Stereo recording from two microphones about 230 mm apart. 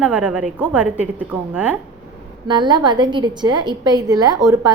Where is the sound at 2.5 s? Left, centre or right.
Centre.